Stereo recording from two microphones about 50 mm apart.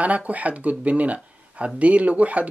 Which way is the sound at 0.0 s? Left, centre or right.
Right.